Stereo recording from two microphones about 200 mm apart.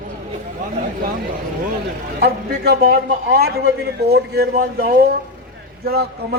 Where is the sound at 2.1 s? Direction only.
55° right (ahead or behind).